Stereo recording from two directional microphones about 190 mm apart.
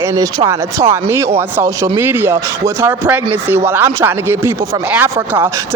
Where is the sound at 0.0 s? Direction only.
15° right (ahead or behind).